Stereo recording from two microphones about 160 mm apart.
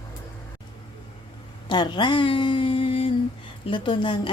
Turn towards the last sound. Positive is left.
turn(degrees=30)  # may be behind; listen again after turning